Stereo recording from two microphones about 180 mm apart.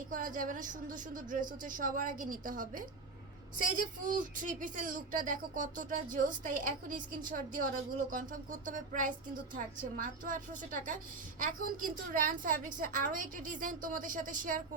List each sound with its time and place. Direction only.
0.1 s a woman's voice: 50° right (ahead or behind)